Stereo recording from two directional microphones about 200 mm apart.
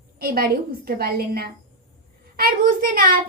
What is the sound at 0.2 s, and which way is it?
A child's voice, 50° right (ahead or behind).